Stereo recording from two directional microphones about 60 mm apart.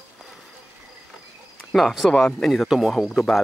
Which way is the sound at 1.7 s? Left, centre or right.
Centre.